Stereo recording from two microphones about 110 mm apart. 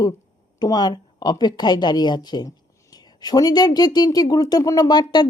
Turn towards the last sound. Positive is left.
turn(degrees=40)  # may be behind; listen again after turning